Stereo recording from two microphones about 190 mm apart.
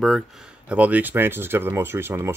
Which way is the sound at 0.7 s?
10° right (ahead or behind).